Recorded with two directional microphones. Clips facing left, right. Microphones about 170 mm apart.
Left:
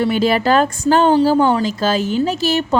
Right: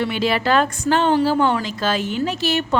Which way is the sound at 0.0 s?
40° left (ahead or behind).